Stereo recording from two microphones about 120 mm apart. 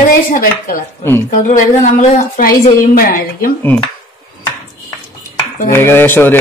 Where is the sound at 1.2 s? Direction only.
90° left.